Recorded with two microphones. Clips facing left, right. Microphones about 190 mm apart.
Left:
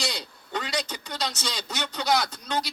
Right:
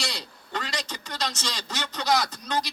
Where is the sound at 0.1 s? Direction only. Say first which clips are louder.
Left 2 dB; centre (ahead or behind).